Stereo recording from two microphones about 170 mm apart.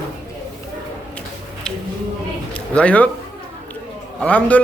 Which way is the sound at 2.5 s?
5° left (ahead or behind).